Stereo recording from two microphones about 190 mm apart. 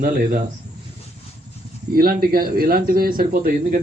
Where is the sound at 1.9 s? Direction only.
50° right (ahead or behind).